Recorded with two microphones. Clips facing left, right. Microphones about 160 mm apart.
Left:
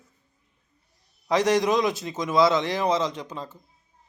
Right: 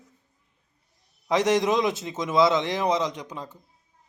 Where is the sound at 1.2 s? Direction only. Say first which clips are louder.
Even; 20° right (ahead or behind).